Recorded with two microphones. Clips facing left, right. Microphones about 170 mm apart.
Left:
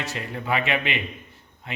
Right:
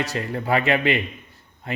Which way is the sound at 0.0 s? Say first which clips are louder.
Right 5 dB; 35° right (ahead or behind).